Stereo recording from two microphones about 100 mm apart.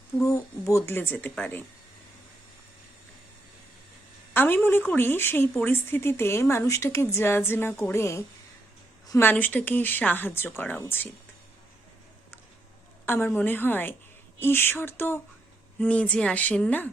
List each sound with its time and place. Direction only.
0.3 s speech: 30° left (ahead or behind)
4.4 s speech: 20° left (ahead or behind)
9.2 s speech: 15° left (ahead or behind)
13.1 s speech: 20° left (ahead or behind)